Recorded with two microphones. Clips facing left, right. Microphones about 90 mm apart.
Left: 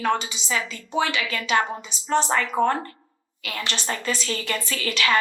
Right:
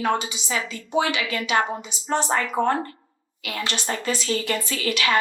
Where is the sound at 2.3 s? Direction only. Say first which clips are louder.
Even; 30° right (ahead or behind).